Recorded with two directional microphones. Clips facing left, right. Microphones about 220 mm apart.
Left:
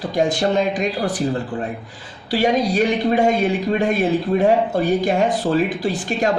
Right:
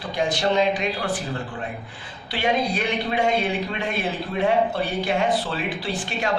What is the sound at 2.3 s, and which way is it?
A man's voice, 40° left (ahead or behind).